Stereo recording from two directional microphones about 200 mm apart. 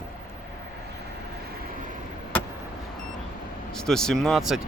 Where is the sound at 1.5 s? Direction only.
45° right (ahead or behind).